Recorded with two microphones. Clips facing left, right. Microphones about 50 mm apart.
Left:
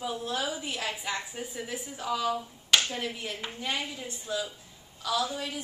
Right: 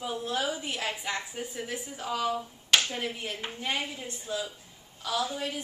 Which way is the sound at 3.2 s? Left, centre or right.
Right.